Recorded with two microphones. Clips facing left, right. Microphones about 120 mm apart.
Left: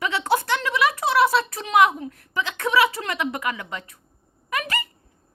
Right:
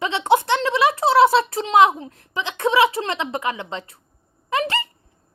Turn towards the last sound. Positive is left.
turn(degrees=-25)  # may be behind; listen again after turning